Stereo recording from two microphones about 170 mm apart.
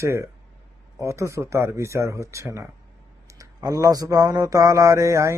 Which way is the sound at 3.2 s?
20° right (ahead or behind).